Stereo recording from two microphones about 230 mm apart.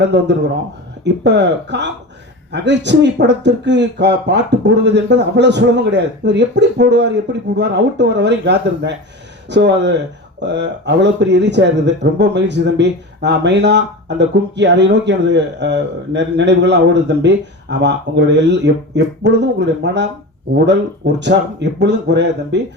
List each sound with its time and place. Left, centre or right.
0.0 s speech: right
21.2 s speech: right